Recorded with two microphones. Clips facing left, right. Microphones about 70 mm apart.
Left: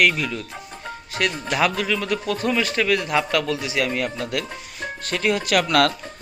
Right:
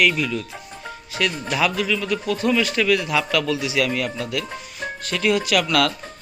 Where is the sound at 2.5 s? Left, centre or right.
Left.